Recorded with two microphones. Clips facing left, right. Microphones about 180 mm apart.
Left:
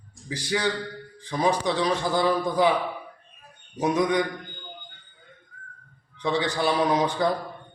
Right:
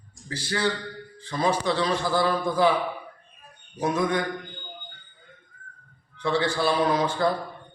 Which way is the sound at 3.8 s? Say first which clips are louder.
Left 2 dB; 20° left (ahead or behind).